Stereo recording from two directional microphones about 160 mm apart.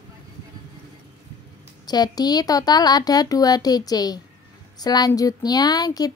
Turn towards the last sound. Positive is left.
turn(degrees=25)  # may be behind; listen again after turning